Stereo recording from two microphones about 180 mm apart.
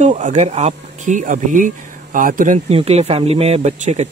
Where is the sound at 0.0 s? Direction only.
40° right (ahead or behind).